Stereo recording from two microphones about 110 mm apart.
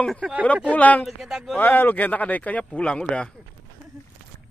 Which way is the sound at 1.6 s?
15° left (ahead or behind).